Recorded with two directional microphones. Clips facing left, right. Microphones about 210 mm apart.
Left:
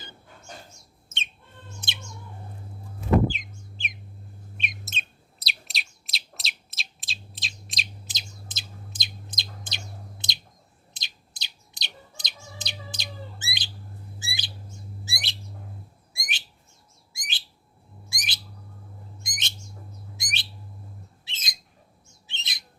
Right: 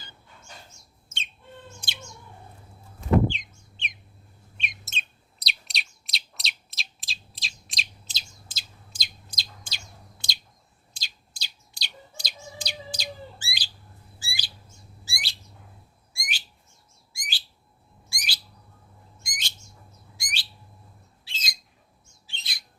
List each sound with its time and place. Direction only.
1.8 s bird: 20° left (ahead or behind)
3.2 s vehicle: centre (ahead or behind)
4.9 s bird: centre (ahead or behind)
8.0 s chirp: 20° left (ahead or behind)
14.2 s bird: 20° left (ahead or behind)